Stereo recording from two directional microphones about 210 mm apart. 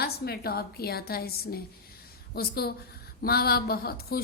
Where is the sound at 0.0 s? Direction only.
50° left (ahead or behind).